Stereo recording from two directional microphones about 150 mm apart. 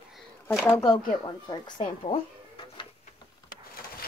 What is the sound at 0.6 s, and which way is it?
Speech, 20° left (ahead or behind).